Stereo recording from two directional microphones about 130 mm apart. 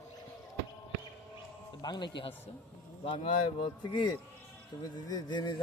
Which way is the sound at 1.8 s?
35° left (ahead or behind).